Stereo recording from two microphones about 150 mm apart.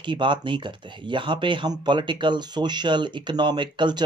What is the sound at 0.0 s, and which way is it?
Speech, 30° right (ahead or behind).